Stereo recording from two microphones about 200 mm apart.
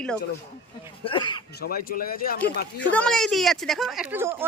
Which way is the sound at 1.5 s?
50° left (ahead or behind).